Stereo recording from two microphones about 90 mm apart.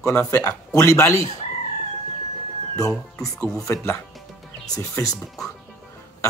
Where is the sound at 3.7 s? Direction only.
25° left (ahead or behind).